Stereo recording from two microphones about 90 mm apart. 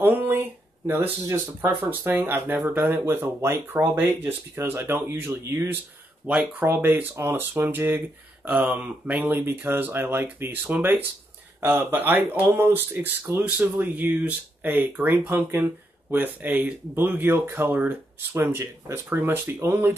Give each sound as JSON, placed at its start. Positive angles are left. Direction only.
{"t": 0.0, "sound": "a sound", "side_deg": -20}
{"t": 0.8, "sound": "speech", "side_deg": -20}
{"t": 1.2, "sound": "speech", "side_deg": -35}
{"t": 1.9, "sound": "speech", "side_deg": -25}
{"t": 8.5, "sound": "speech", "side_deg": -15}